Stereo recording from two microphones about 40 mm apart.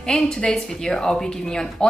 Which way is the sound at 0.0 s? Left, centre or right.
Centre.